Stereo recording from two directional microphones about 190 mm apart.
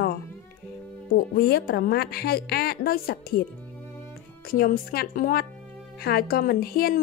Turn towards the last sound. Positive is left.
turn(degrees=50)  # may be behind; listen again after turning